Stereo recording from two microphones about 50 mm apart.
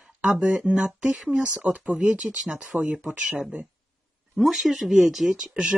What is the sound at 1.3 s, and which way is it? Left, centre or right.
Speech, right.